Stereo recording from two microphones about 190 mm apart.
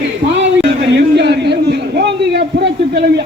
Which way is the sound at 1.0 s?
60° right (ahead or behind).